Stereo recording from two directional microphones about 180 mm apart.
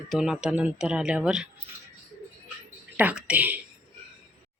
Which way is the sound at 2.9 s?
5° right (ahead or behind).